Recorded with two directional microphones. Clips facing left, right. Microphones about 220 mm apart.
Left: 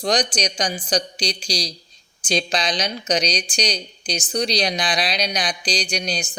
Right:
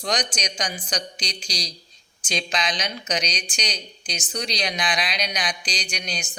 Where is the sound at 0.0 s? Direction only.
35° left (ahead or behind).